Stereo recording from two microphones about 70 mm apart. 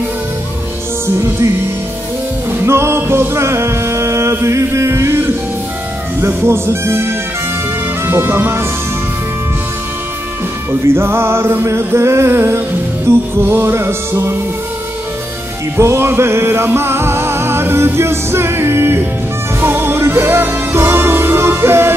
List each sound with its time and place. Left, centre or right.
1.0 s music: right
2.6 s music: right
10.7 s music: right
15.8 s music: right